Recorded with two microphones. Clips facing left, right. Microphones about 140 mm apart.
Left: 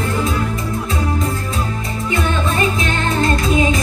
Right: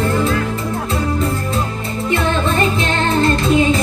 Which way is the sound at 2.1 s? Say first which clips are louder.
Right 2 dB; 30° right (ahead or behind).